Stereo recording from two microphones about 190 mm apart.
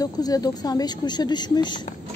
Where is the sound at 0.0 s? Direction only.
20° left (ahead or behind).